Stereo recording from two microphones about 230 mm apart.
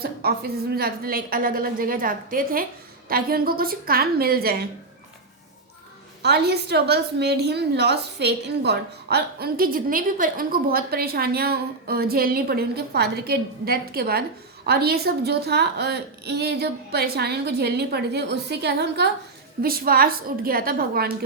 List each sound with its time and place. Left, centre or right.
0.0 s a woman's voice: right
6.2 s a woman's voice: right